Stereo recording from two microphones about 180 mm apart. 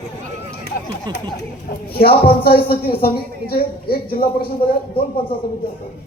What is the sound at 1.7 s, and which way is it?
Speech, 55° left (ahead or behind).